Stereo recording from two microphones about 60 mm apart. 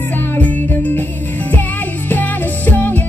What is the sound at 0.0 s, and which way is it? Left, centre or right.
Music, left.